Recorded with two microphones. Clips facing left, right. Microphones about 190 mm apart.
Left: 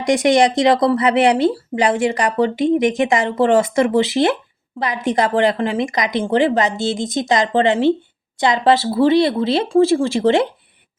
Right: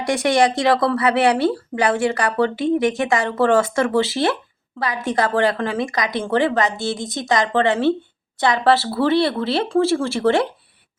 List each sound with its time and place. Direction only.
0.0 s speech: 15° left (ahead or behind)